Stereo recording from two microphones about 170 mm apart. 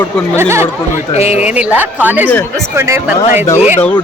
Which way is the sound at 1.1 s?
40° left (ahead or behind).